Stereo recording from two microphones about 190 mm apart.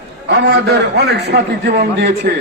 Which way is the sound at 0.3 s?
65° right (ahead or behind).